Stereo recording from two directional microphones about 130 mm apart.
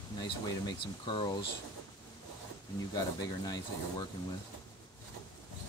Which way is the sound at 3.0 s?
30° left (ahead or behind).